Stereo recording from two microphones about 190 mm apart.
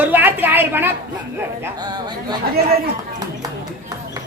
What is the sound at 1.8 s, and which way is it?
Speech, 20° right (ahead or behind).